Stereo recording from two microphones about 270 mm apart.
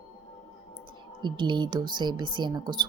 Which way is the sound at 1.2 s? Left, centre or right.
Centre.